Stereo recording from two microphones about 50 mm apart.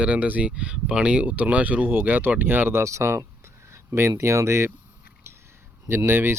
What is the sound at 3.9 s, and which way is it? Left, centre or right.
Speech, right.